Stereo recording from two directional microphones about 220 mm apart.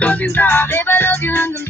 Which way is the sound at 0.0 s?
5° left (ahead or behind).